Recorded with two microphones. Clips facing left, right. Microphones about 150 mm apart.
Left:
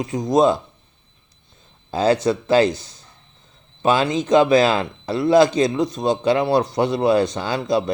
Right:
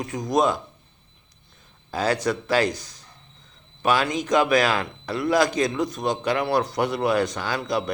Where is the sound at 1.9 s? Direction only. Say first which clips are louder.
Left 6 dB; 25° left (ahead or behind).